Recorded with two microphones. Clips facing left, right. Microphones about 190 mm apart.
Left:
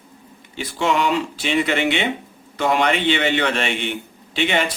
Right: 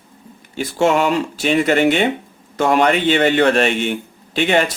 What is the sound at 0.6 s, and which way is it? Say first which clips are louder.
Speech: right 5 dB; 45° right (ahead or behind).